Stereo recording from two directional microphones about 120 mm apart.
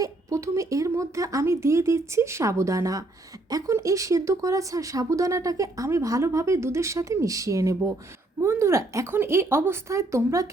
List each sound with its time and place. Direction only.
0.0 s speech: 25° right (ahead or behind)